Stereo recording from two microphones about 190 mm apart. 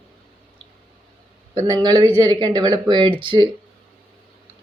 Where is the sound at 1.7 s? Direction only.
20° right (ahead or behind).